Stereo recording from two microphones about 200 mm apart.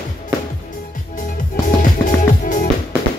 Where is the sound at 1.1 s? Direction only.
45° left (ahead or behind).